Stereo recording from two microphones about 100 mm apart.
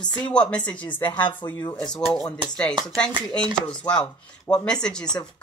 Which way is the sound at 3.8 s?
10° left (ahead or behind).